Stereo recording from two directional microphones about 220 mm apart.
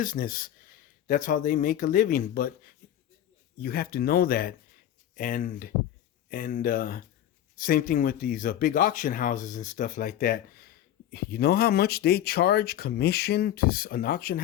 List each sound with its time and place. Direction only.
0.0 s speech: 40° left (ahead or behind)
3.6 s speech: 45° left (ahead or behind)